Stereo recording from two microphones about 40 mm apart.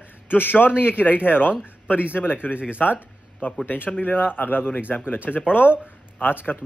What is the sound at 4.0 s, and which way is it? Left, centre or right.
A man's voice, left.